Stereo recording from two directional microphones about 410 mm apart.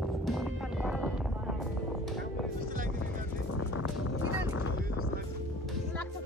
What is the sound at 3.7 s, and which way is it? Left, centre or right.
Speech, left.